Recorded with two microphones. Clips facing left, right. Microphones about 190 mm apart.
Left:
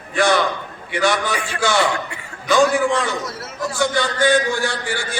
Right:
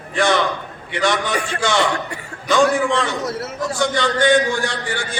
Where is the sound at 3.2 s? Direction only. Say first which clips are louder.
Right 6 dB; 60° right (ahead or behind).